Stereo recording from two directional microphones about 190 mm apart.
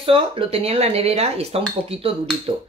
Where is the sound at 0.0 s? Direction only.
30° right (ahead or behind).